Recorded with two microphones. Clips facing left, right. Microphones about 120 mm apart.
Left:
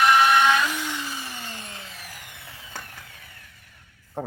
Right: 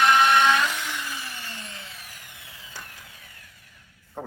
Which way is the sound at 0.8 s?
20° left (ahead or behind).